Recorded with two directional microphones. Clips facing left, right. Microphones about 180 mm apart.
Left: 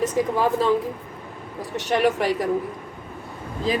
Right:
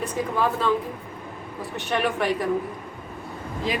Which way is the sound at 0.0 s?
40° left (ahead or behind).